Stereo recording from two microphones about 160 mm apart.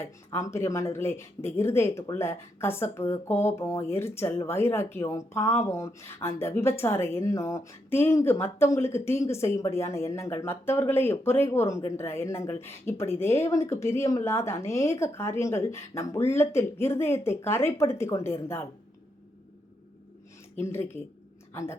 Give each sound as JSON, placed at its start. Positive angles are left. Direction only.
{"t": 0.0, "sound": "speech", "side_deg": 15}
{"t": 20.6, "sound": "a woman's voice", "side_deg": 15}